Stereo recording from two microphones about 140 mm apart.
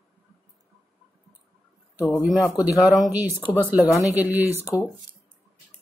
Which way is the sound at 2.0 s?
20° left (ahead or behind).